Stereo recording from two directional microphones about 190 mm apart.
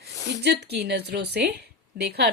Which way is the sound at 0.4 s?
60° right (ahead or behind).